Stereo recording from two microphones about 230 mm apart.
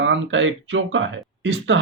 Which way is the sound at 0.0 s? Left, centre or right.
Right.